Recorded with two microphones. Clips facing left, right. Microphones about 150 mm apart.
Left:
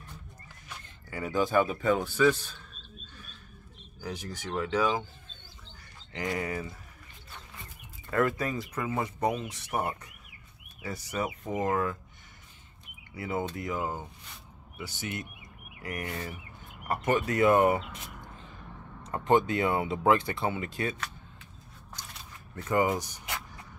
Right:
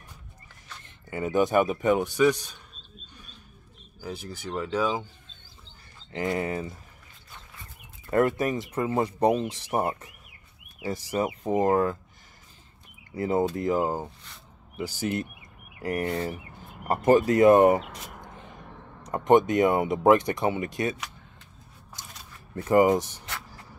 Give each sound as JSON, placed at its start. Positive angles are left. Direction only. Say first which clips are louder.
{"t": 0.8, "sound": "speech", "louder": "right 6 dB", "side_deg": -20}
{"t": 4.0, "sound": "speech", "louder": "right 2 dB", "side_deg": -10}
{"t": 6.1, "sound": "speech", "louder": "right 4 dB", "side_deg": -25}
{"t": 8.1, "sound": "speech", "louder": "right 5 dB", "side_deg": -25}
{"t": 13.1, "sound": "speech", "louder": "right 8 dB", "side_deg": -35}
{"t": 17.4, "sound": "speech", "louder": "right 4 dB", "side_deg": -20}
{"t": 19.0, "sound": "speech", "louder": "right 5 dB", "side_deg": -15}
{"t": 22.6, "sound": "speech", "louder": "right 7 dB", "side_deg": -25}